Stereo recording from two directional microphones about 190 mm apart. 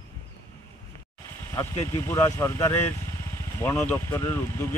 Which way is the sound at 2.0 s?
15° left (ahead or behind).